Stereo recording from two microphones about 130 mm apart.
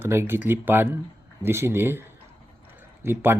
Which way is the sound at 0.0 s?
20° right (ahead or behind).